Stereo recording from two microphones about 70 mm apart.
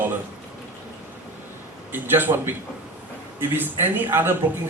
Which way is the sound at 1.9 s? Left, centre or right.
Right.